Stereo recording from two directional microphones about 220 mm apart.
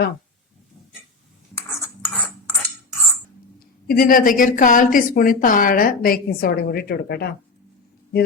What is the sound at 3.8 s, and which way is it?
A woman's voice, 40° left (ahead or behind).